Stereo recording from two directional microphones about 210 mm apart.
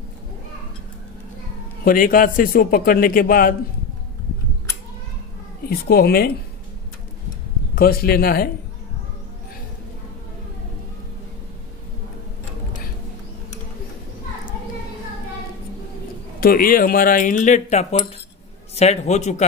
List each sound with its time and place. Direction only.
1.9 s a man's voice: 40° left (ahead or behind)
5.7 s a man's voice: 45° left (ahead or behind)
7.7 s a man's voice: 45° left (ahead or behind)
16.3 s speech: 45° left (ahead or behind)